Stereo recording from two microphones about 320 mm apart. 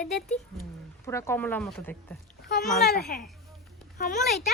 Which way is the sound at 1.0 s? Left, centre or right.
Centre.